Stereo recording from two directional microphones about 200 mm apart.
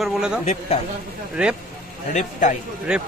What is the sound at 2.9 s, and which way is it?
Speech, 5° right (ahead or behind).